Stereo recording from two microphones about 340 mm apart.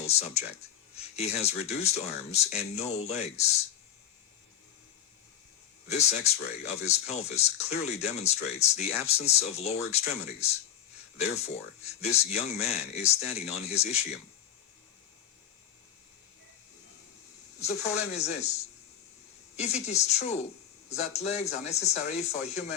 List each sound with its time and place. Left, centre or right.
0.0 s speech: centre
5.9 s speech: centre
17.8 s speech: centre